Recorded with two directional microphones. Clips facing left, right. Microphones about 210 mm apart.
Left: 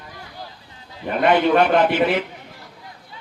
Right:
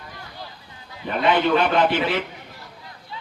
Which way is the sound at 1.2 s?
55° left (ahead or behind).